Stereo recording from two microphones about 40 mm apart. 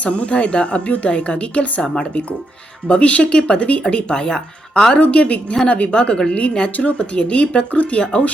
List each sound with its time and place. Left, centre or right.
0.0 s a woman's voice: left; by 4.9 s centre
4.9 s a woman's voice: left